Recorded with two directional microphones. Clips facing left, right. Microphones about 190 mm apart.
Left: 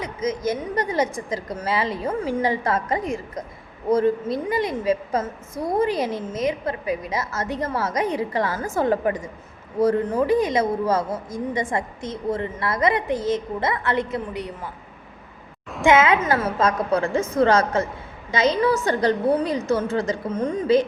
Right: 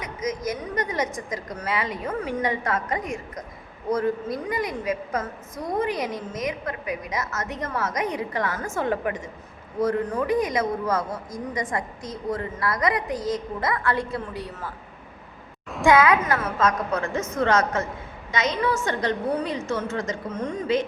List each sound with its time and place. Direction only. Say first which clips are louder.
0.0 s a woman's voice: left 4 dB; 25° left (ahead or behind)
15.8 s a woman's voice: left 1 dB; 25° left (ahead or behind)